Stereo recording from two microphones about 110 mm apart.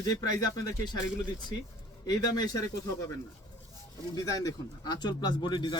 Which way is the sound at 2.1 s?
35° left (ahead or behind).